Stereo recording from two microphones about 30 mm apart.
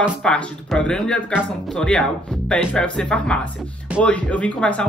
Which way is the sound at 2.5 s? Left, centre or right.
Left.